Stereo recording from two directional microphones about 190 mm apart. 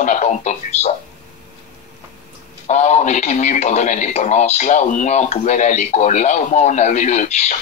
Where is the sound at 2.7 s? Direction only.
35° left (ahead or behind).